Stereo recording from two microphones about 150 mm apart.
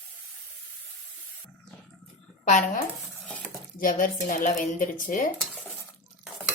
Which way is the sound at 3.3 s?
10° left (ahead or behind).